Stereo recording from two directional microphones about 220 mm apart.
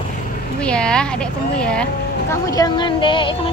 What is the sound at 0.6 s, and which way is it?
Speech, 5° left (ahead or behind).